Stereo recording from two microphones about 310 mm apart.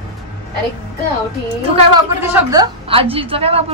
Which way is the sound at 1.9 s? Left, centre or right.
Centre.